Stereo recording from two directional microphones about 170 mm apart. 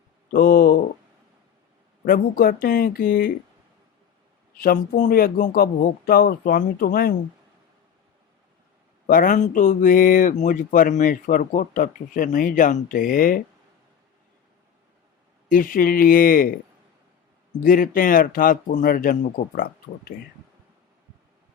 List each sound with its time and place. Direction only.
0.3 s speech: 60° left (ahead or behind)
2.0 s speech: 60° left (ahead or behind)
4.6 s speech: 55° left (ahead or behind)
9.0 s speech: 50° left (ahead or behind)
15.4 s speech: 55° left (ahead or behind)
17.6 s speech: 55° left (ahead or behind)